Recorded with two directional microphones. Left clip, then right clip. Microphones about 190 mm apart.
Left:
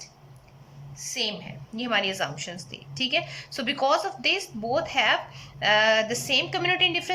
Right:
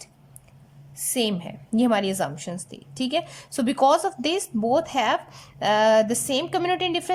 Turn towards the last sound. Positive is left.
turn(degrees=-25)  # may be behind; listen again after turning